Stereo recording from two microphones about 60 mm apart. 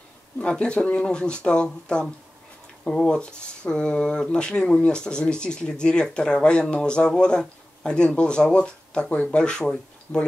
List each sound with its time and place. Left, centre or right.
0.4 s speech: centre